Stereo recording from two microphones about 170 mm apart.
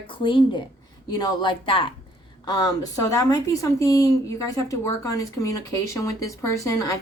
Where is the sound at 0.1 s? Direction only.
30° left (ahead or behind).